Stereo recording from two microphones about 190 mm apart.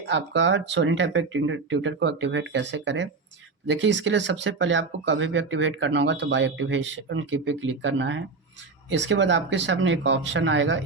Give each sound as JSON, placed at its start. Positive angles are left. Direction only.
{"t": 0.0, "sound": "speech", "side_deg": -70}